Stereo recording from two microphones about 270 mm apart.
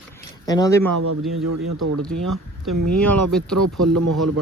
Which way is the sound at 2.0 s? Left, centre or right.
Centre.